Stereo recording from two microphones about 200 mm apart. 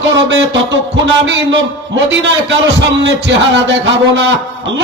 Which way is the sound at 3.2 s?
60° right (ahead or behind).